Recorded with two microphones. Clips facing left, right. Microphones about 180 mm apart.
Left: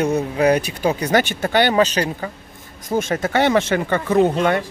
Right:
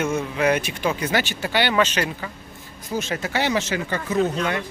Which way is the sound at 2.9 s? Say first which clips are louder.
Left 6 dB; 45° left (ahead or behind).